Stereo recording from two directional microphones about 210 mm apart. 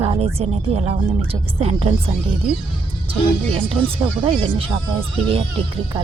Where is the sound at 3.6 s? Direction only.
25° right (ahead or behind).